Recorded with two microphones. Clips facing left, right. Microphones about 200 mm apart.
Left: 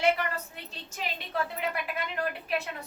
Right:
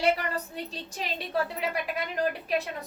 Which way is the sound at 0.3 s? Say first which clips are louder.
Right 6 dB; 35° right (ahead or behind).